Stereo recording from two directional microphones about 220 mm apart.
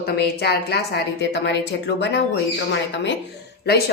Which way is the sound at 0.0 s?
45° left (ahead or behind).